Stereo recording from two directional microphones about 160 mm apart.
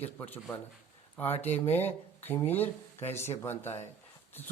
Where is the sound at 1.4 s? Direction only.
40° left (ahead or behind).